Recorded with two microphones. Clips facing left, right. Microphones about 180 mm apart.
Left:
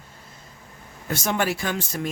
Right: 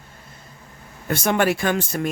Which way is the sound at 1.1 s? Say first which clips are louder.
Right 5 dB; 60° right (ahead or behind).